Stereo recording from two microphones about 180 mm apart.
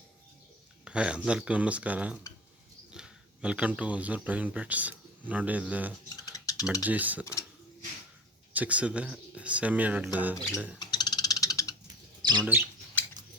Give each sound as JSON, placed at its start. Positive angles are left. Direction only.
{"t": 0.9, "sound": "speech", "side_deg": -5}
{"t": 6.2, "sound": "typing", "side_deg": 20}
{"t": 6.8, "sound": "speech", "side_deg": -10}
{"t": 8.5, "sound": "speech", "side_deg": -10}
{"t": 10.8, "sound": "a sound", "side_deg": 25}
{"t": 12.4, "sound": "speech", "side_deg": -10}